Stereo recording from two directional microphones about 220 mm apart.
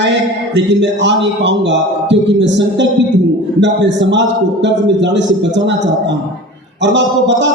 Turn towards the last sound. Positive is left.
turn(degrees=-55)  # may be behind; listen again after turning